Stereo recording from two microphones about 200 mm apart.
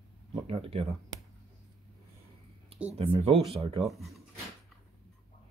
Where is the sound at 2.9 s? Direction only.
30° right (ahead or behind).